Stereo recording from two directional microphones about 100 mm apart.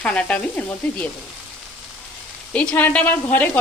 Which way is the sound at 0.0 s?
10° left (ahead or behind).